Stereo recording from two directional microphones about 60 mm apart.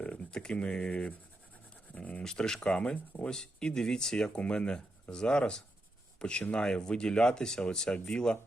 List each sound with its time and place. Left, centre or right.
0.0 s speech: centre
2.2 s speech: centre